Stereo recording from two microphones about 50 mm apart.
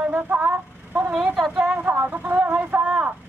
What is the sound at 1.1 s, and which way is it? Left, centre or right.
Speech, centre.